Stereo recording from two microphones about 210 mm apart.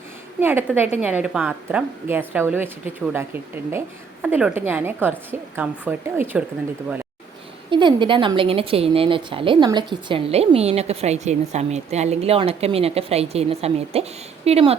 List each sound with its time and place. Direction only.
0.3 s a woman's voice: 10° right (ahead or behind)
7.7 s a woman's voice: 20° right (ahead or behind)